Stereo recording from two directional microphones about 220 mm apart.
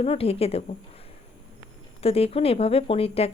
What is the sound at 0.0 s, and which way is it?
Speech, 25° left (ahead or behind).